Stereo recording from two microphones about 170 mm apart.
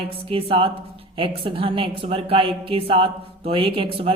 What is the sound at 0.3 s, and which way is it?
A woman's voice, 30° right (ahead or behind).